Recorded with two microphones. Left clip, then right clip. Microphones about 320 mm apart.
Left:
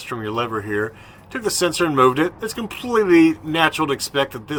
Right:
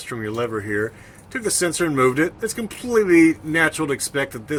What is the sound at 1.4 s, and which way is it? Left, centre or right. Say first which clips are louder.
Speech: left 2 dB; left.